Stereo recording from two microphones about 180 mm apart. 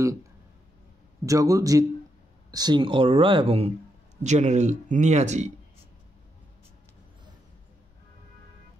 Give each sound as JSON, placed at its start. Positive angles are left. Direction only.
{"t": 1.2, "sound": "speech", "side_deg": -20}